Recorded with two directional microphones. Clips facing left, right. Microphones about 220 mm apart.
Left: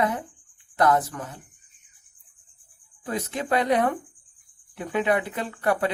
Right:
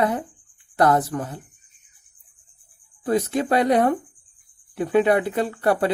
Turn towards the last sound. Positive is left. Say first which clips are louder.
# right 4 dB
turn(degrees=-35)  # may be behind; listen again after turning